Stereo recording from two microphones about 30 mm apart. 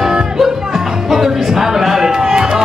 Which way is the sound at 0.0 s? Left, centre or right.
Centre.